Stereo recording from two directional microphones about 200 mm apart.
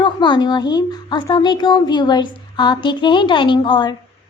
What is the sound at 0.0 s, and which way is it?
A woman's voice, 25° left (ahead or behind).